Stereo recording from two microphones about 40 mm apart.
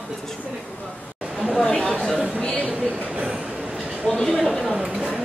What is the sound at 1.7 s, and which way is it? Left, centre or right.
Speech, left.